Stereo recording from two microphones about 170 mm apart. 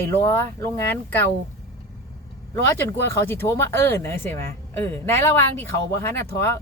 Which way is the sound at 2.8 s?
15° left (ahead or behind).